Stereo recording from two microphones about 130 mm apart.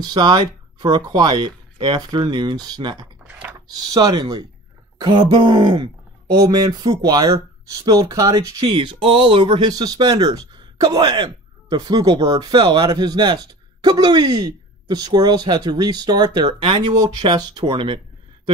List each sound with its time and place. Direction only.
0.0 s speech: 35° right (ahead or behind)
3.3 s a sound: 10° right (ahead or behind)
3.5 s speech: 30° right (ahead or behind)
6.3 s speech: 30° right (ahead or behind)